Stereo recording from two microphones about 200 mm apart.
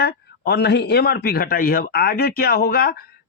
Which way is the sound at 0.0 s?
55° left (ahead or behind).